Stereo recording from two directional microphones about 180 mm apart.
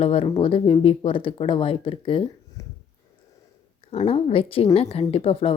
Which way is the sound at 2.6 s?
20° left (ahead or behind).